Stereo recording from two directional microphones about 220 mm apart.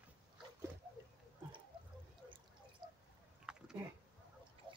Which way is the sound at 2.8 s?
20° right (ahead or behind).